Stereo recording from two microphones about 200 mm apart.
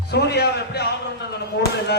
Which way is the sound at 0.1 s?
55° left (ahead or behind).